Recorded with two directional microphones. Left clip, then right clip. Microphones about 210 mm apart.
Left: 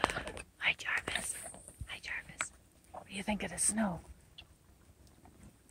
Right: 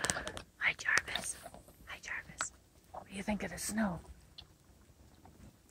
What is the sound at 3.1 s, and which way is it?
Speech, centre (ahead or behind).